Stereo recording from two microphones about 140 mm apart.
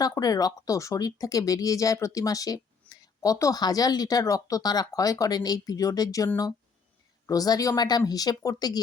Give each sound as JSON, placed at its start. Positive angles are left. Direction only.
{"t": 0.0, "sound": "speech", "side_deg": 25}